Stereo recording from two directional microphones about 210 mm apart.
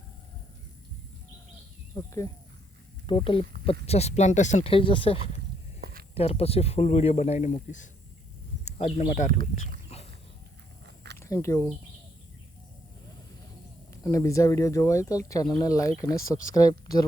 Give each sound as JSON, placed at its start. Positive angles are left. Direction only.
{"t": 2.0, "sound": "speech", "side_deg": 15}
{"t": 5.8, "sound": "a sound", "side_deg": -45}
{"t": 6.1, "sound": "speech", "side_deg": 30}
{"t": 10.8, "sound": "a sound", "side_deg": -55}
{"t": 11.2, "sound": "speech", "side_deg": 15}
{"t": 13.9, "sound": "speech", "side_deg": 15}